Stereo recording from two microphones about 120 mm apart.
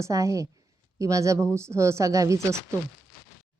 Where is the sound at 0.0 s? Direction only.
25° right (ahead or behind).